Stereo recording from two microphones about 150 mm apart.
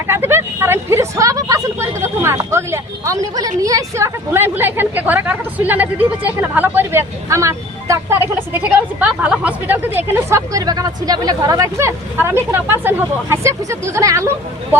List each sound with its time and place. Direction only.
0.1 s a woman's voice: 15° right (ahead or behind)